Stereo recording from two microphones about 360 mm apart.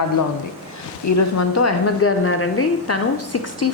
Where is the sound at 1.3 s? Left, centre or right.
Left.